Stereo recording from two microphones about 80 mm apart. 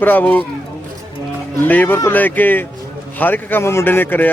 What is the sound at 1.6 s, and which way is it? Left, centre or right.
Speech, left.